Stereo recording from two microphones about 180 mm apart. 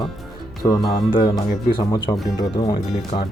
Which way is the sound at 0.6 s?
20° left (ahead or behind).